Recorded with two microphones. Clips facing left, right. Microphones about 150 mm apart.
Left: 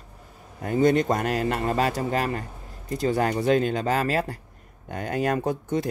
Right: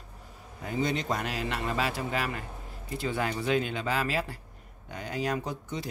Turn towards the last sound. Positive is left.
turn(degrees=55)  # may be behind; listen again after turning